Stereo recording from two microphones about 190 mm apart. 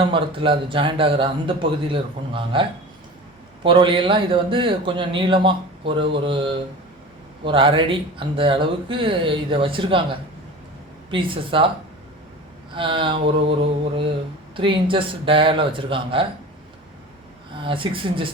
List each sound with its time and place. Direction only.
0.0 s speech: 25° right (ahead or behind)
11.1 s speech: 25° right (ahead or behind)
12.7 s speech: 25° right (ahead or behind)
17.6 s speech: 25° right (ahead or behind)